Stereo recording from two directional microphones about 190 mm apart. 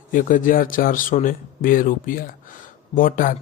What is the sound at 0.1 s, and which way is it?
Speech, 45° left (ahead or behind).